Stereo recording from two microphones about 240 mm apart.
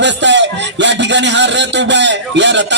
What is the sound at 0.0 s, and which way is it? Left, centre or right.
Speech, right.